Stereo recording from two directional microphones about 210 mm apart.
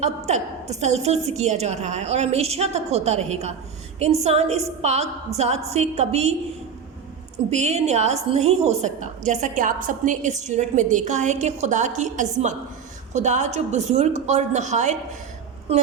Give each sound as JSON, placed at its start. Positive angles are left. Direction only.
{"t": 0.0, "sound": "a woman's voice", "side_deg": -30}
{"t": 7.5, "sound": "a woman's voice", "side_deg": -30}